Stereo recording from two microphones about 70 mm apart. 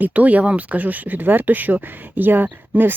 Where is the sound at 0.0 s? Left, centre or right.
Right.